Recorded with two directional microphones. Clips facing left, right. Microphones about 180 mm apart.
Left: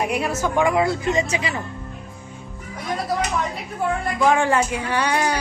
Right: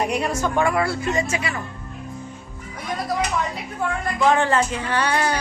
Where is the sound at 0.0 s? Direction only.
5° left (ahead or behind).